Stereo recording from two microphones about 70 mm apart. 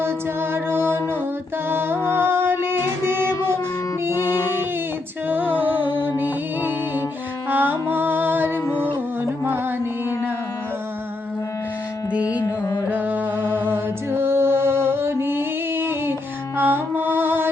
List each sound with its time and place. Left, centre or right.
0.5 s music: right
8.7 s music: left
9.4 s music: right
12.5 s carnatic music: left
12.9 s music: right